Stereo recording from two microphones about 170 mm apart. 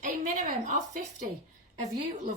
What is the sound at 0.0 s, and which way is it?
A woman's voice, 50° right (ahead or behind).